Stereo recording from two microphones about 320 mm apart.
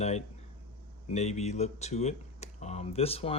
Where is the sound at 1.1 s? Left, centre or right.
Left.